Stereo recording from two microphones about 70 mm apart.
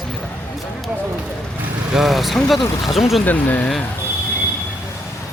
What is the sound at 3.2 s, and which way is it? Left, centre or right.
Speech, left.